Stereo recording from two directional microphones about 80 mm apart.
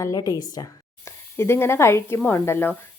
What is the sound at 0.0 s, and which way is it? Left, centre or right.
A woman's voice, left.